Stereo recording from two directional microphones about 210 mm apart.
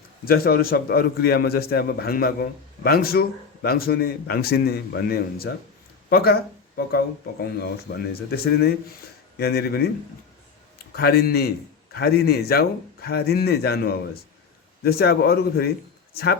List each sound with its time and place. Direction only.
0.3 s a man's voice: 45° left (ahead or behind)
10.9 s a man's voice: 45° left (ahead or behind)